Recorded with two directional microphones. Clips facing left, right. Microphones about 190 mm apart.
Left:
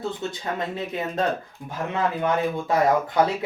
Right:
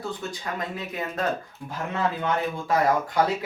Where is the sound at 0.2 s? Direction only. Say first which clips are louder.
Left 3 dB; 25° left (ahead or behind).